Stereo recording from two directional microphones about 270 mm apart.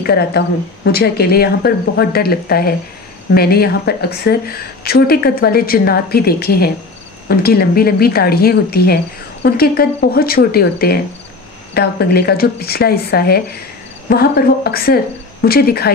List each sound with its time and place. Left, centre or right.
0.0 s a woman's voice: left